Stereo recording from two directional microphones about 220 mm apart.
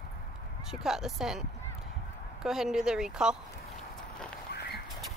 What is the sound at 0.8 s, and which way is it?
Speech, centre (ahead or behind).